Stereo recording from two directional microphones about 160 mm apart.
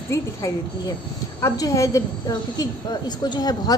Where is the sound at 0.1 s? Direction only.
20° left (ahead or behind).